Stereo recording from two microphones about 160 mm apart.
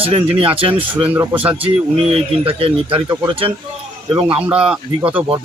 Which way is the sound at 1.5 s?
35° right (ahead or behind).